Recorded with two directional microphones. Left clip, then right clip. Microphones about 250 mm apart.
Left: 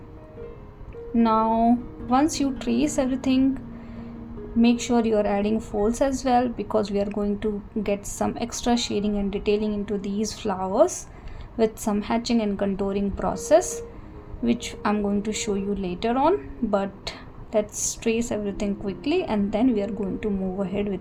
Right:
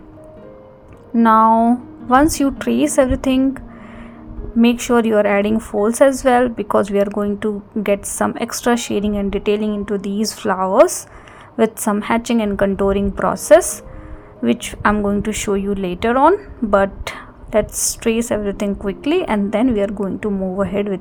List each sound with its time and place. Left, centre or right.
1.1 s a woman's voice: right
4.6 s a woman's voice: right